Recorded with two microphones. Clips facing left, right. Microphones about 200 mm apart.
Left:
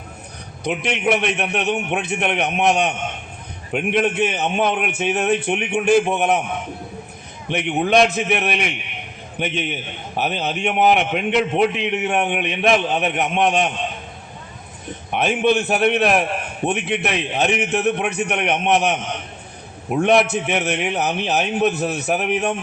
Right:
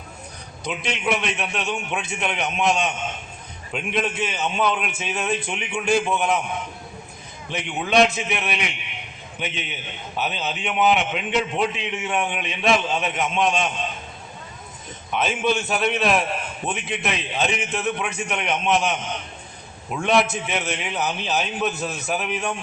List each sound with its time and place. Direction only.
0.6 s a man's voice: 60° left (ahead or behind)
7.5 s a man's voice: 60° left (ahead or behind)
15.1 s a man's voice: 60° left (ahead or behind)